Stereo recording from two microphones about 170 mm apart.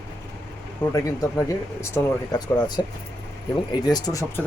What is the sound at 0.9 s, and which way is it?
Speech, 20° left (ahead or behind).